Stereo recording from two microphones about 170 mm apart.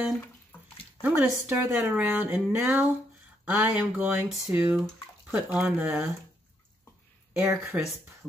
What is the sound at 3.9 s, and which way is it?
Speech, 5° right (ahead or behind).